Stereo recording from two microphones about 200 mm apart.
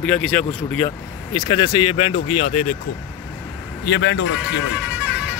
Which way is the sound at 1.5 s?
25° left (ahead or behind).